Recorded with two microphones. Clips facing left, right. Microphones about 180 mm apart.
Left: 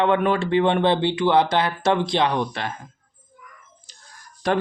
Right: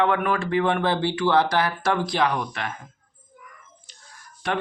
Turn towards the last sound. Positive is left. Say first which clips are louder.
# left 5 dB
turn(degrees=40)  # may be behind; listen again after turning